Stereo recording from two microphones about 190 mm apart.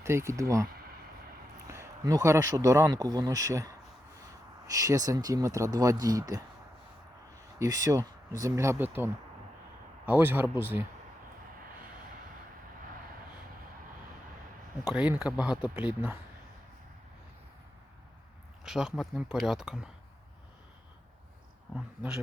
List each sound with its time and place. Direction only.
0.0 s speech: 15° right (ahead or behind)
1.7 s speech: 15° right (ahead or behind)
7.6 s speech: 15° right (ahead or behind)
10.1 s speech: 10° right (ahead or behind)
14.8 s speech: 5° right (ahead or behind)
18.6 s speech: centre (ahead or behind)